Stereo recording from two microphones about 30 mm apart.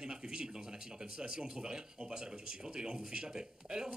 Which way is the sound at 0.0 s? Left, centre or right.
Right.